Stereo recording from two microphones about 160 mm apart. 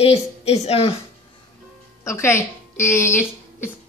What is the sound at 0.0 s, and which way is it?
Speech, 40° left (ahead or behind).